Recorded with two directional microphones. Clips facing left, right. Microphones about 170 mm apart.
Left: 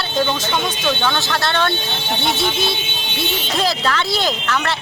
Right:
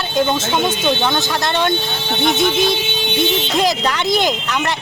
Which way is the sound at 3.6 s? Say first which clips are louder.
Even; 15° right (ahead or behind).